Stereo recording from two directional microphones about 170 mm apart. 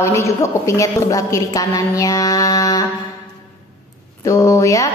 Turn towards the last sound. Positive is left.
turn(degrees=20)  # may be behind; listen again after turning